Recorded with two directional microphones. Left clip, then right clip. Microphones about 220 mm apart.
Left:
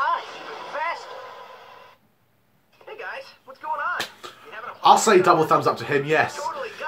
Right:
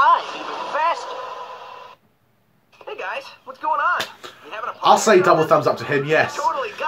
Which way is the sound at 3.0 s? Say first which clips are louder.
Right 6 dB; 45° right (ahead or behind).